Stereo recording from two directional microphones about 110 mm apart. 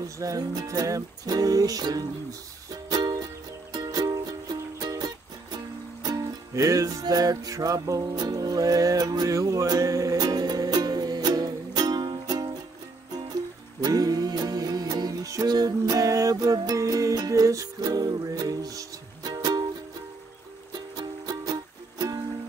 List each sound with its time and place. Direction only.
0.2 s music: 35° right (ahead or behind)
13.8 s music: 35° right (ahead or behind)
20.7 s music: 40° right (ahead or behind)